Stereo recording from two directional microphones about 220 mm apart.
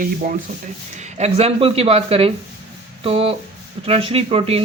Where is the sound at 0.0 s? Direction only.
35° right (ahead or behind).